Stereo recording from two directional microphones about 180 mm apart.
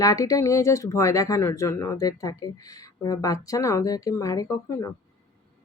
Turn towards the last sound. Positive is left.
turn(degrees=20)  # may be behind; listen again after turning